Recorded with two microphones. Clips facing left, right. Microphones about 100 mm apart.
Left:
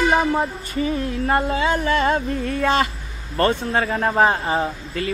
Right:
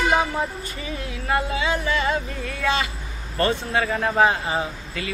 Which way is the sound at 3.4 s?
40° left (ahead or behind).